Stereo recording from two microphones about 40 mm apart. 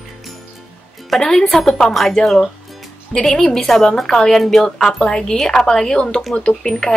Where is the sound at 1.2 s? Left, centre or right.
Centre.